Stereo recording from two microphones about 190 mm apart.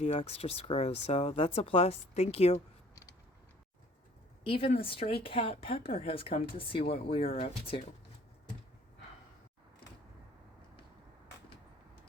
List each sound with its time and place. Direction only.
0.0 s speech: 30° left (ahead or behind)
4.4 s speech: 30° left (ahead or behind)